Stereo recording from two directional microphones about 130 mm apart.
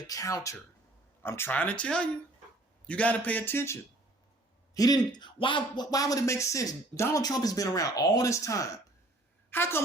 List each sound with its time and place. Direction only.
0.1 s a man's voice: 25° left (ahead or behind)
4.7 s speech: 30° left (ahead or behind)